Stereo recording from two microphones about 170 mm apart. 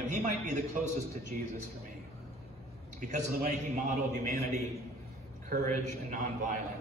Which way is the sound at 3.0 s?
45° right (ahead or behind).